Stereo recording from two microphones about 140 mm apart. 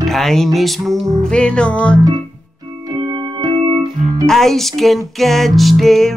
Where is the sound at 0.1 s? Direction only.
Centre (ahead or behind).